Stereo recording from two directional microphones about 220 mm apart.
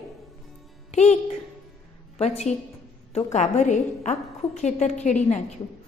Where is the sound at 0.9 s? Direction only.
30° left (ahead or behind).